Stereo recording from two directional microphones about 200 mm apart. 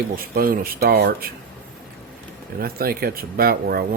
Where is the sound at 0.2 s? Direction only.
45° right (ahead or behind).